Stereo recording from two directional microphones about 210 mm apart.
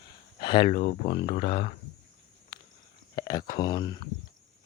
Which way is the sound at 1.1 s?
25° left (ahead or behind).